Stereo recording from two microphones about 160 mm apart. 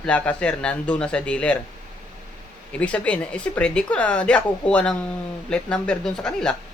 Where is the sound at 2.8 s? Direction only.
10° left (ahead or behind).